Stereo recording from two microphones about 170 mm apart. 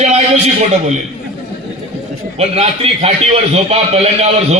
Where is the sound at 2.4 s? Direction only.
35° right (ahead or behind).